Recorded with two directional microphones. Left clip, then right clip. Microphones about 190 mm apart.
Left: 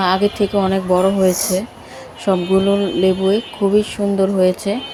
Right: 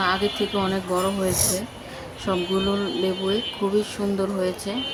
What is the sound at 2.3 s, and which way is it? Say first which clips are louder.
Speech: left 8 dB; 15° left (ahead or behind).